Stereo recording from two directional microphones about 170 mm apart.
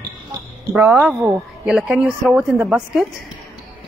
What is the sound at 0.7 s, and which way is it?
Speech, 5° right (ahead or behind).